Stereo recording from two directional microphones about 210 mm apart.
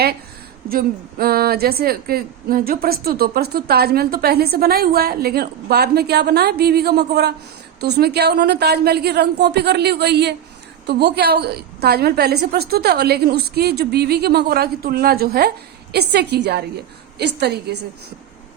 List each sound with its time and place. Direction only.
0.7 s a woman's voice: 45° right (ahead or behind)